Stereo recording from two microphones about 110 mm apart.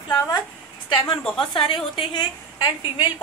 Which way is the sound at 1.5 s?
50° left (ahead or behind).